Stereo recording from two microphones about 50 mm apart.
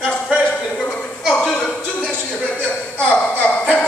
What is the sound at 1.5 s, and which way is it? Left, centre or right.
Music, centre.